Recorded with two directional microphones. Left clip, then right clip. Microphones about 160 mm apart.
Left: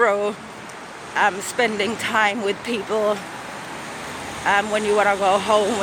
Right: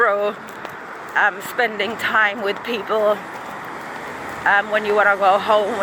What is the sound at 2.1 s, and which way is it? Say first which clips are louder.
Speech: right 2 dB; 30° left (ahead or behind).